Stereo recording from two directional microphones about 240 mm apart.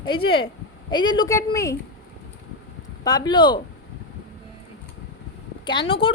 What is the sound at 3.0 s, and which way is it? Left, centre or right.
Speech, centre.